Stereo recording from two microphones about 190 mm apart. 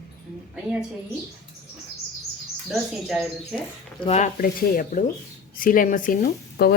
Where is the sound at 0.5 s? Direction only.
5° right (ahead or behind).